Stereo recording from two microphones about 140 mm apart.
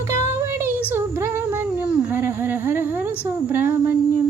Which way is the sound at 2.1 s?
15° right (ahead or behind).